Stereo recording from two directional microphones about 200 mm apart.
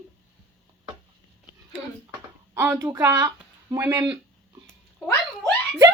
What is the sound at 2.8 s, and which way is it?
Speech, 20° right (ahead or behind).